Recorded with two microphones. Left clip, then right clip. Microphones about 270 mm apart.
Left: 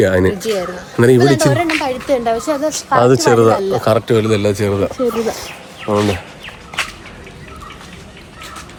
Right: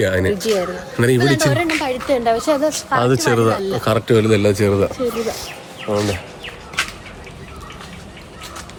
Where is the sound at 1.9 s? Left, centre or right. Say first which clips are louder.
Left 1 dB; centre.